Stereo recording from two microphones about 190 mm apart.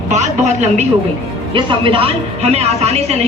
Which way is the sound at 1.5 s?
25° right (ahead or behind).